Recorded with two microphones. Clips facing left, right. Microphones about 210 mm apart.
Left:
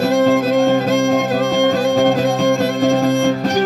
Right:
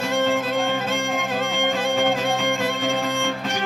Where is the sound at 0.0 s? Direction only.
40° left (ahead or behind).